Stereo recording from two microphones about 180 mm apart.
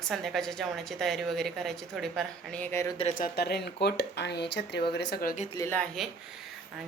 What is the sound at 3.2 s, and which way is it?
Speech, 60° left (ahead or behind).